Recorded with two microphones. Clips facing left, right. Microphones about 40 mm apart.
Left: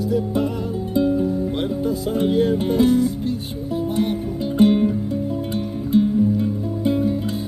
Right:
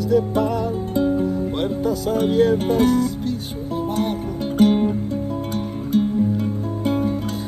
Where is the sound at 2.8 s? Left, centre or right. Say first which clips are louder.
Left 1 dB; left.